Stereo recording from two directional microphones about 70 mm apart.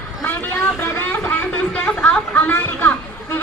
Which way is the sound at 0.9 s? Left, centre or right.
Left.